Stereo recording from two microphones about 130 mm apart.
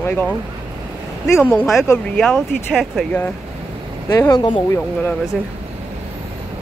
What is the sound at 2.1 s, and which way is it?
Speech, 5° left (ahead or behind).